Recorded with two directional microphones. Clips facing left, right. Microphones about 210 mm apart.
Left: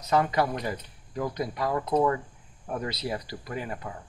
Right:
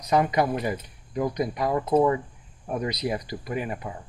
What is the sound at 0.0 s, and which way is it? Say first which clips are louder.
Speech: right 2 dB; 15° right (ahead or behind).